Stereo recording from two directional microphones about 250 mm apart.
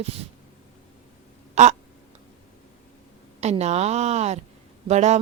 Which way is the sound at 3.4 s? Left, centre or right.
Right.